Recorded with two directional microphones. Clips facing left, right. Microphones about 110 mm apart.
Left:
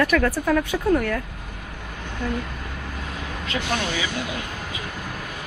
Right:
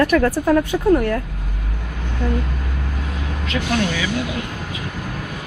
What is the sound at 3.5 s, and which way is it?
Speech, 20° left (ahead or behind).